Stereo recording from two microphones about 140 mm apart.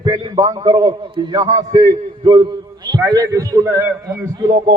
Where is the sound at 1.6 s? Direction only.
55° right (ahead or behind).